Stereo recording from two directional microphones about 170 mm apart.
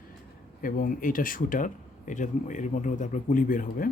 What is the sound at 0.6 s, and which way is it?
Speech, 55° left (ahead or behind).